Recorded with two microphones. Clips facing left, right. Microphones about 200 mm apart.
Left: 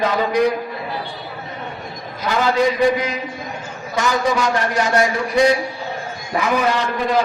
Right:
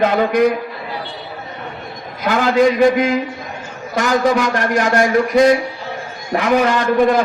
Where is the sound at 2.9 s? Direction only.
50° right (ahead or behind).